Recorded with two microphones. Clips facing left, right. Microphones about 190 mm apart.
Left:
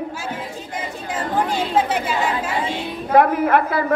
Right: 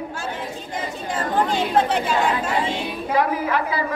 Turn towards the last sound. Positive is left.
turn(degrees=55)  # may be behind; listen again after turning